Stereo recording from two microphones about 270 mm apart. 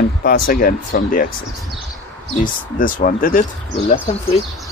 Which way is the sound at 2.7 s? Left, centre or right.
Left.